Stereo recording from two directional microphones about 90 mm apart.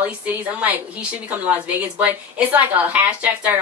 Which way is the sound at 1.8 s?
15° right (ahead or behind).